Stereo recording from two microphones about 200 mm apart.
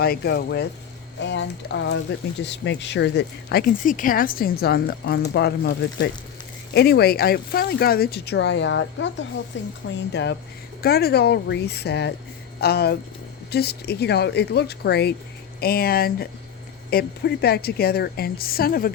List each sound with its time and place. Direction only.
0.0 s speech: 55° left (ahead or behind)